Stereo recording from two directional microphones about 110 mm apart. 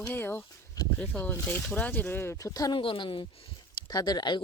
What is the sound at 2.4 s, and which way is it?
Speech, 35° left (ahead or behind).